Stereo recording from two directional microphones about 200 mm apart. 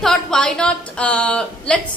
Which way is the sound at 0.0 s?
Centre (ahead or behind).